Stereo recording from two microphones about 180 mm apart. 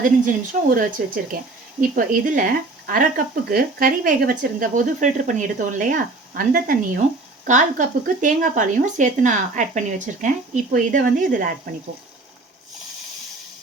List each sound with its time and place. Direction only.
0.0 s speech: 50° right (ahead or behind)